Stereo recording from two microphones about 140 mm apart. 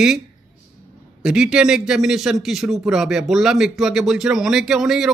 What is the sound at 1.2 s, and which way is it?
A man's voice, 5° right (ahead or behind).